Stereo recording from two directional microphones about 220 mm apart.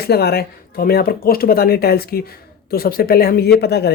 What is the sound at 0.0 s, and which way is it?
Speech, 45° left (ahead or behind).